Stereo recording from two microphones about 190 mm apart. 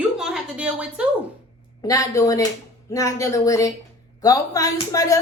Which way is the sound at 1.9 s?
15° left (ahead or behind).